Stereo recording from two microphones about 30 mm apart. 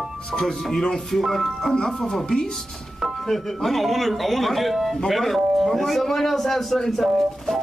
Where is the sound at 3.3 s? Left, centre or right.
Centre.